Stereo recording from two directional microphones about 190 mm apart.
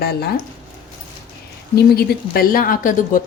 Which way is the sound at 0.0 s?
55° left (ahead or behind).